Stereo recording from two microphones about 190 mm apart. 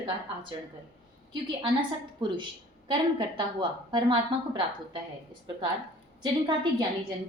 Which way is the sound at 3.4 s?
25° right (ahead or behind).